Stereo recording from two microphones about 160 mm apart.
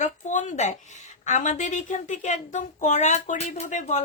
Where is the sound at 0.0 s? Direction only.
50° left (ahead or behind).